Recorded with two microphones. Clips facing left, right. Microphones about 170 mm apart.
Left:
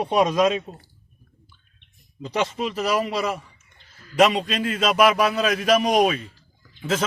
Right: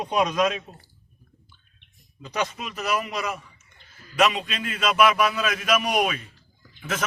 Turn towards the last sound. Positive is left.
turn(degrees=30)  # may be behind; listen again after turning